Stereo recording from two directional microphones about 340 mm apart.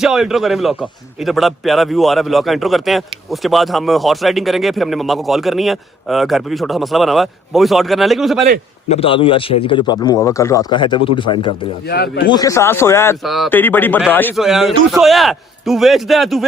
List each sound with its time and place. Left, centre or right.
0.0 s speech: centre
8.9 s a man's voice: centre
11.9 s speech: left
12.3 s speech: centre